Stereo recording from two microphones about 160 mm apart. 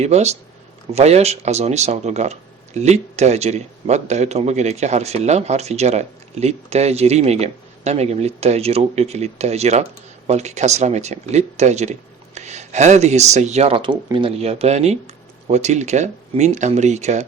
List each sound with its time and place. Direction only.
0.0 s speech: 45° right (ahead or behind)